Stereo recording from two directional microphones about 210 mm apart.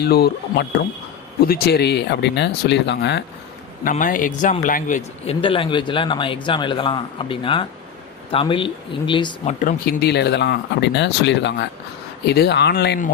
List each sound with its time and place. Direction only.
0.0 s speech: 50° left (ahead or behind)
3.8 s speech: 40° left (ahead or behind)